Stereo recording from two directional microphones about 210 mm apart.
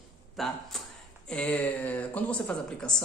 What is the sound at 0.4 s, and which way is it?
A man's voice, centre (ahead or behind).